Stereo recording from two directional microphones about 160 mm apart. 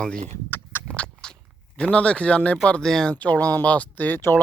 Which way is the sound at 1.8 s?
5° left (ahead or behind).